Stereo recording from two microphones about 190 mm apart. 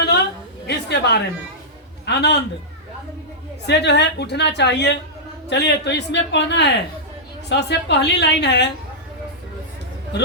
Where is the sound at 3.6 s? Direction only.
65° left (ahead or behind).